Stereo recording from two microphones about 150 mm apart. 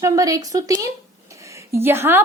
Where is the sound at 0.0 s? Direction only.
20° right (ahead or behind).